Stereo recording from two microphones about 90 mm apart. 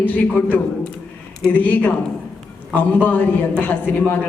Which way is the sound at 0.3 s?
20° left (ahead or behind).